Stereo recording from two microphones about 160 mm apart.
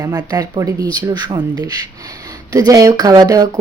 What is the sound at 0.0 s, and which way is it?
Speech, 25° right (ahead or behind).